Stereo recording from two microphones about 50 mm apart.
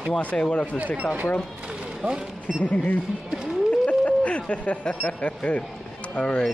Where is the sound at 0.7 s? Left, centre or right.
Right.